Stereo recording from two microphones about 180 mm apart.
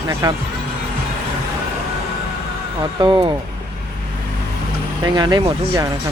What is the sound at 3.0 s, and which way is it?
Speech, 25° right (ahead or behind).